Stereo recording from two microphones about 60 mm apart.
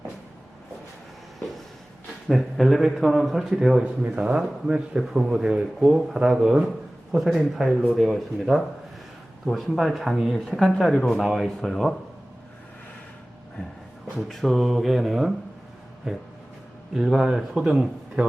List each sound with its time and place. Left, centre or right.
2.2 s speech: centre
3.8 s a man's voice: centre
14.2 s a man's voice: centre